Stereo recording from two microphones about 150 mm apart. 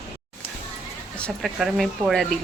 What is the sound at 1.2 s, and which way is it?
Speech, 5° left (ahead or behind).